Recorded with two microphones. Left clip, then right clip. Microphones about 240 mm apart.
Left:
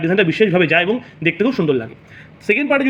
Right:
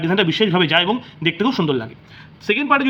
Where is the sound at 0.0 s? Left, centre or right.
Centre.